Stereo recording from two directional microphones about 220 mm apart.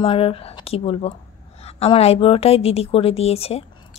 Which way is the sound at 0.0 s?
25° left (ahead or behind).